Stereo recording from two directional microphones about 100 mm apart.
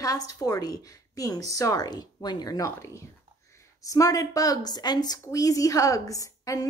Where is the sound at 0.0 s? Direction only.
40° left (ahead or behind).